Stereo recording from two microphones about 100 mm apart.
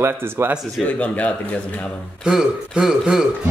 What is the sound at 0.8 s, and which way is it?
Speech, 15° left (ahead or behind).